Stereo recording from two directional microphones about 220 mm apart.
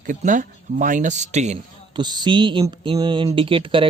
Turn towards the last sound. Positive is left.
turn(degrees=-25)  # may be behind; listen again after turning